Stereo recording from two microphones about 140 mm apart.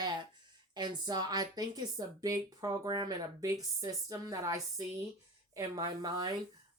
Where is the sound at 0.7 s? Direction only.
30° right (ahead or behind).